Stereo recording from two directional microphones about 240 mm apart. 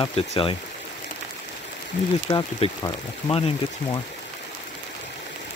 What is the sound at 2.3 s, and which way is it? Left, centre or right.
Speech, centre.